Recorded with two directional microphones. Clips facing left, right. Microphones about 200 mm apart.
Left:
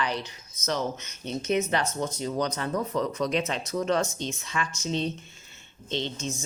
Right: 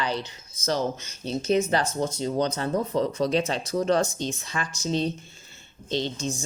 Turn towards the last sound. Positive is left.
turn(degrees=-35)  # may be behind; listen again after turning